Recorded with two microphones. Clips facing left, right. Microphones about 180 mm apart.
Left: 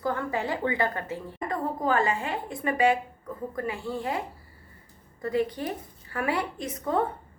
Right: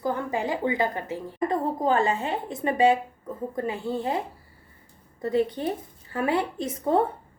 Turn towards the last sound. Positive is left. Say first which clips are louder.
# right 4 dB
turn(degrees=-30)  # may be behind; listen again after turning